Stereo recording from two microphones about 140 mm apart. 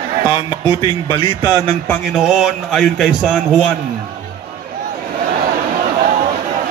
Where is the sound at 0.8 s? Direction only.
40° left (ahead or behind).